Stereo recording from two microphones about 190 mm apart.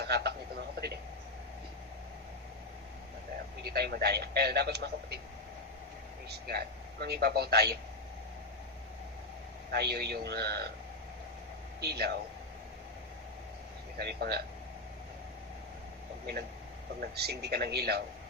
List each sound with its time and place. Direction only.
0.0 s a sound: 60° right (ahead or behind)
3.6 s a man's voice: 55° right (ahead or behind)
6.2 s a man's voice: 55° right (ahead or behind)
9.7 s a man's voice: 55° right (ahead or behind)
11.8 s a man's voice: 60° right (ahead or behind)
14.0 s a man's voice: 60° right (ahead or behind)
17.0 s a man's voice: 60° right (ahead or behind)